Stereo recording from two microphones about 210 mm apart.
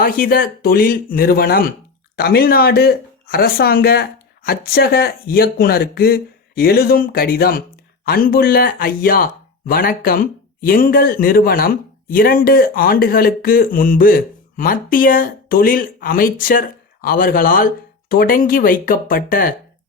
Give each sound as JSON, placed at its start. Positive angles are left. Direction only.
{"t": 0.0, "sound": "speech", "side_deg": 45}